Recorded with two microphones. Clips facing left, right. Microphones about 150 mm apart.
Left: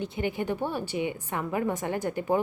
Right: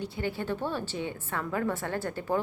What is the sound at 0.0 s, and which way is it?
A woman's voice, 20° left (ahead or behind).